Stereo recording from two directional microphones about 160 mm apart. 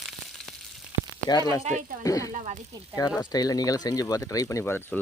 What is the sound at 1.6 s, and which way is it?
Speech, 50° right (ahead or behind).